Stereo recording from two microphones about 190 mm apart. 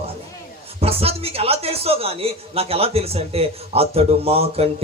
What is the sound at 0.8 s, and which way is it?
A man's voice, 30° right (ahead or behind).